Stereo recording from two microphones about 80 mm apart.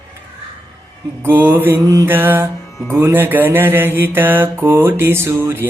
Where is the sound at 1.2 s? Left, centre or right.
Right.